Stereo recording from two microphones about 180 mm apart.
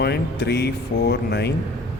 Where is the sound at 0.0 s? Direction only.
65° left (ahead or behind).